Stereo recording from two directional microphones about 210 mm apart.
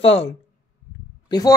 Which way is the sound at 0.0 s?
30° left (ahead or behind).